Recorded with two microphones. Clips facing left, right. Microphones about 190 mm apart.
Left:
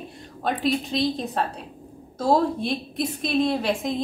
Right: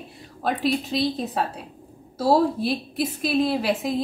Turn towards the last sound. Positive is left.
turn(degrees=-5)  # may be behind; listen again after turning